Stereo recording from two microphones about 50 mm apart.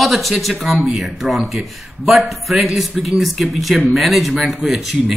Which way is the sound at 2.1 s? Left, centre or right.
Centre.